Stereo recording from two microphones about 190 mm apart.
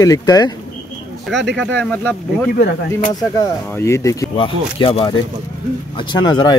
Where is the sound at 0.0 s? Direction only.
20° left (ahead or behind).